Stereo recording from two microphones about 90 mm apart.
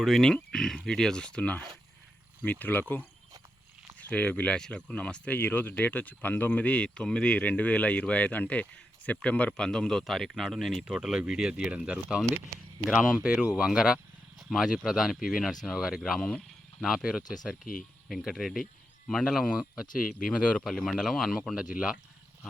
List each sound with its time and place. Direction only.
0.0 s speech: 5° left (ahead or behind)
3.9 s speech: 15° left (ahead or behind); by 21.9 s 10° right (ahead or behind)